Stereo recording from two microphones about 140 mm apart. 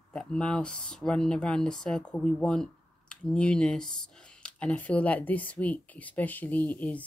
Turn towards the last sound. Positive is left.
turn(degrees=10)  # may be behind; listen again after turning